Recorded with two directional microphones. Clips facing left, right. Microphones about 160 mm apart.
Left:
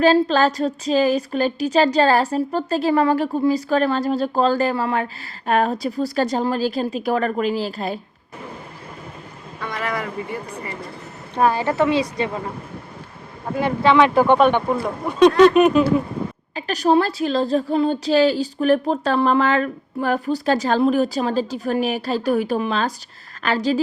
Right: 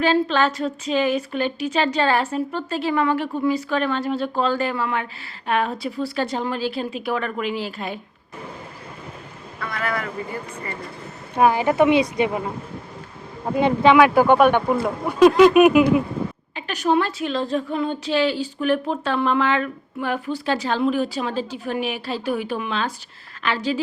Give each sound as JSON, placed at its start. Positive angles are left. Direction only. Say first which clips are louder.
{"t": 0.0, "sound": "a woman's voice", "louder": "left 4 dB", "side_deg": 40}
{"t": 9.7, "sound": "speech", "louder": "left 1 dB", "side_deg": 20}
{"t": 11.3, "sound": "speech", "louder": "right 1 dB", "side_deg": -15}
{"t": 13.6, "sound": "speech", "louder": "right 1 dB", "side_deg": -20}
{"t": 16.6, "sound": "a woman's voice", "louder": "left 3 dB", "side_deg": 35}